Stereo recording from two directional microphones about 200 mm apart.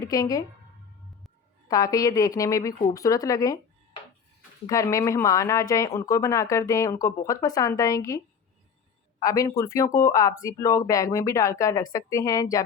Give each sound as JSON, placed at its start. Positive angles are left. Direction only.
{"t": 0.0, "sound": "a woman's voice", "side_deg": 15}
{"t": 1.6, "sound": "speech", "side_deg": 15}
{"t": 4.6, "sound": "speech", "side_deg": 15}
{"t": 9.2, "sound": "speech", "side_deg": 15}